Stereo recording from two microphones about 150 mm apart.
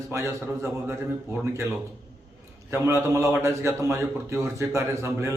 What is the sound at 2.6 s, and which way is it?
A man's voice, 15° right (ahead or behind).